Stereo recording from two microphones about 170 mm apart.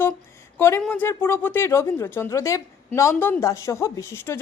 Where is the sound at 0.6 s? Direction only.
15° left (ahead or behind).